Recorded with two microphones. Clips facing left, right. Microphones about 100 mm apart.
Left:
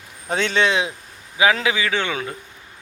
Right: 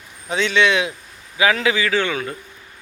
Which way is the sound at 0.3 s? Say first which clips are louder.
Right 2 dB; 50° left (ahead or behind).